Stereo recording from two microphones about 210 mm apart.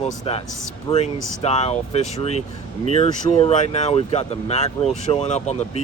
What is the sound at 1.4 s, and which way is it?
Speech, 30° left (ahead or behind).